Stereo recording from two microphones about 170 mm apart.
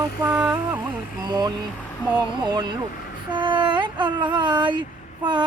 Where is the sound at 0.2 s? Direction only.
10° right (ahead or behind).